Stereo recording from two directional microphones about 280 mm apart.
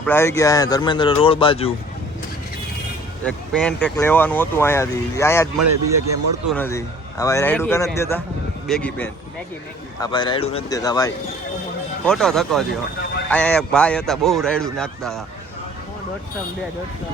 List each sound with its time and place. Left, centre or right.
0.0 s speech: centre
3.2 s speech: centre
5.5 s speech: right
6.5 s a man's voice: centre
10.0 s speech: centre
12.0 s a man's voice: centre